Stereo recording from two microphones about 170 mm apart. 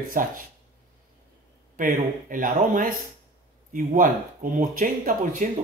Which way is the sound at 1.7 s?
50° right (ahead or behind).